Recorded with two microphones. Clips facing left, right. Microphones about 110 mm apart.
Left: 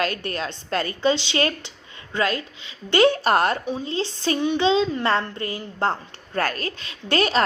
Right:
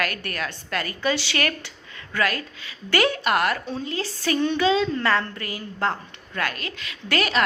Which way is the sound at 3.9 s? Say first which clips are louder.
Left 1 dB; 25° left (ahead or behind).